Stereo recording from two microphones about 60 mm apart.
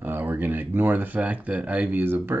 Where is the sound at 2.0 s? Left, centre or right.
Right.